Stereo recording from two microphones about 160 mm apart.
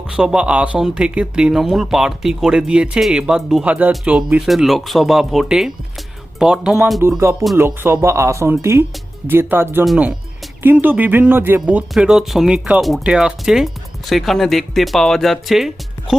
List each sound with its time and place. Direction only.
0.2 s speech: 5° right (ahead or behind)
7.5 s speech: 15° right (ahead or behind)